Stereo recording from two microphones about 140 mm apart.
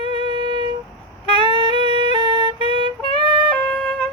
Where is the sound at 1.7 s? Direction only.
40° left (ahead or behind).